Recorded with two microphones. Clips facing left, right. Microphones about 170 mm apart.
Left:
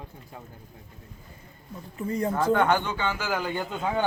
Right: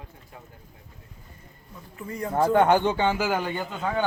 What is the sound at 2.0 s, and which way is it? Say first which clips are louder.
Speech: left 5 dB; 25° left (ahead or behind).